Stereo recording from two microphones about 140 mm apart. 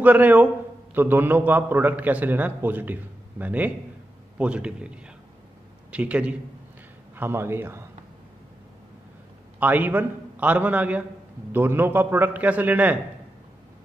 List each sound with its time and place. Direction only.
0.0 s a man's voice: 10° right (ahead or behind)
9.6 s a man's voice: 10° right (ahead or behind)